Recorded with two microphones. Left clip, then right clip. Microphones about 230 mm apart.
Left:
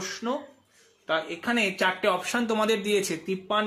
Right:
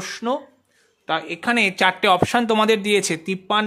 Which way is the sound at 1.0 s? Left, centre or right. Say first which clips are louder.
Right 5 dB; right.